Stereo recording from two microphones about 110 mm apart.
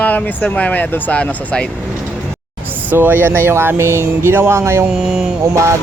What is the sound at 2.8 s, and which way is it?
Speech, 15° right (ahead or behind).